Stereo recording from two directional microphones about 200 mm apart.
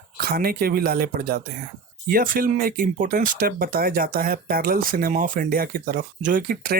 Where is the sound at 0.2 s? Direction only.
50° right (ahead or behind).